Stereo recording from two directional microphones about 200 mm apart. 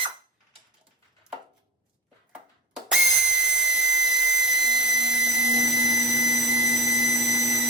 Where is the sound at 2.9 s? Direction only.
5° right (ahead or behind).